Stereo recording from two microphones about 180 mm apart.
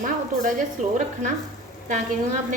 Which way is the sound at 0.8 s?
40° right (ahead or behind).